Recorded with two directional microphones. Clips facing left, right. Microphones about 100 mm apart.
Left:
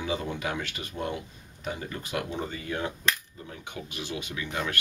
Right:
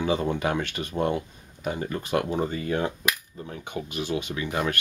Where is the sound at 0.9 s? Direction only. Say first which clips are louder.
Right 8 dB; 45° right (ahead or behind).